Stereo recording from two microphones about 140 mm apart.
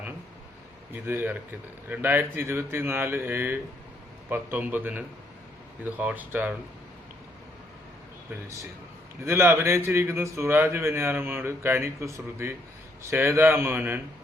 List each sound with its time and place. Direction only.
1.0 s a man's voice: 15° right (ahead or behind)
9.2 s a man's voice: 20° right (ahead or behind)